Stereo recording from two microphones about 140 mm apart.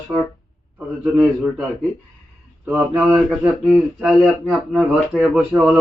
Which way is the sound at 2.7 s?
10° right (ahead or behind).